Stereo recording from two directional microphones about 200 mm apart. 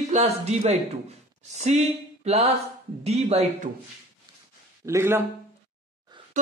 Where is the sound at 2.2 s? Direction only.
35° right (ahead or behind).